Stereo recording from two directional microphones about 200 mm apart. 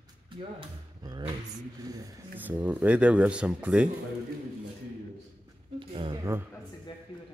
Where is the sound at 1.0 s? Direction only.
20° right (ahead or behind).